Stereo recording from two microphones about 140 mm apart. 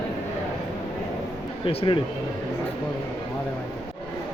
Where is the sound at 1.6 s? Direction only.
40° left (ahead or behind).